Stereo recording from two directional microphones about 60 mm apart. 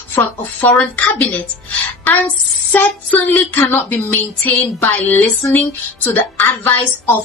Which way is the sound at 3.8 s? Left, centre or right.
Left.